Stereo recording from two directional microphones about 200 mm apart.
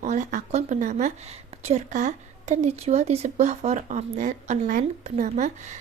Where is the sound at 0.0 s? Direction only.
35° right (ahead or behind).